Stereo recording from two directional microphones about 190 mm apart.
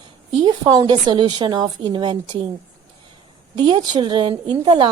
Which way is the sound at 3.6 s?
25° right (ahead or behind).